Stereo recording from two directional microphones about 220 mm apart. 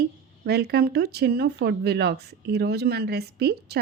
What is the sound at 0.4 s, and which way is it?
Speech, 45° right (ahead or behind).